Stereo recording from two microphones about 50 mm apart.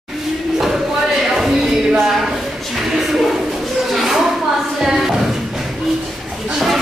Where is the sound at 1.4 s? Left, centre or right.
Centre.